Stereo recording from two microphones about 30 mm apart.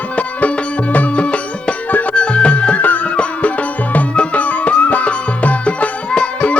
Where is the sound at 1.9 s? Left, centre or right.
Left.